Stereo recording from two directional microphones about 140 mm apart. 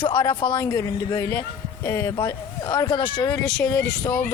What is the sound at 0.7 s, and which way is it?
A woman's voice, 25° left (ahead or behind).